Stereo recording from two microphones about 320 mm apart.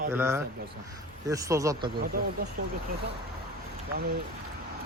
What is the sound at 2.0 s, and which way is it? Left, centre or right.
Speech, right.